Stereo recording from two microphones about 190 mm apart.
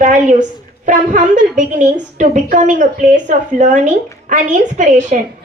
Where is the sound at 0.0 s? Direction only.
40° right (ahead or behind).